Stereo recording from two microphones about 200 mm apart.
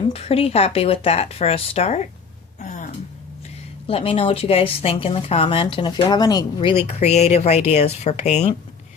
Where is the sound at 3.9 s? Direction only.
30° left (ahead or behind).